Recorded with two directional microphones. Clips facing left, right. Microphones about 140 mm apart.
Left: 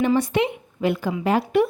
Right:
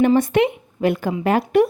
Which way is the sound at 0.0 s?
50° right (ahead or behind).